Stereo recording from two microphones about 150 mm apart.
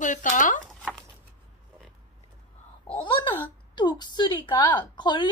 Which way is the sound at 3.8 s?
30° left (ahead or behind).